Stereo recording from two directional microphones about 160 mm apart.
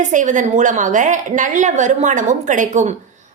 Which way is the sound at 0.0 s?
50° right (ahead or behind).